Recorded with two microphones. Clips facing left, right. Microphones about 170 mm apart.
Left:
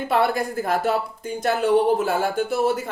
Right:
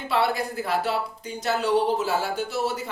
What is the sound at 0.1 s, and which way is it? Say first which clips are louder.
Speech: left 3 dB; 50° left (ahead or behind).